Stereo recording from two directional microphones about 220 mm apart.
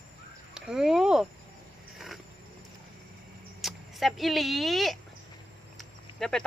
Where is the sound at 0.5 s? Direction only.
5° right (ahead or behind).